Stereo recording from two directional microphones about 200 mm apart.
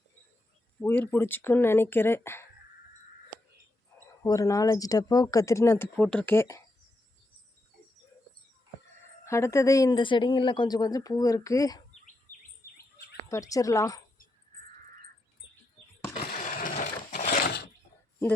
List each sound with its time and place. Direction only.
0.8 s speech: 10° left (ahead or behind)
4.2 s speech: 15° left (ahead or behind)
9.2 s speech: 15° left (ahead or behind)
13.2 s speech: 15° left (ahead or behind)
16.4 s a sound: 40° left (ahead or behind)